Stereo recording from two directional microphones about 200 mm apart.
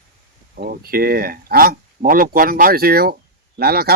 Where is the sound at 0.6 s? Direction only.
50° right (ahead or behind).